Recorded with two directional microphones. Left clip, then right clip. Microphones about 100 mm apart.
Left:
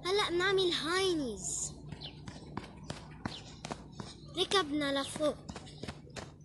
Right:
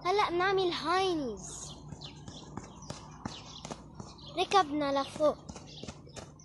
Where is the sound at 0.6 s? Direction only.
90° right.